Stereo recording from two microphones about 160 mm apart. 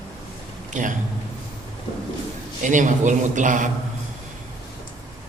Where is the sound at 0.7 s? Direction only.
50° right (ahead or behind).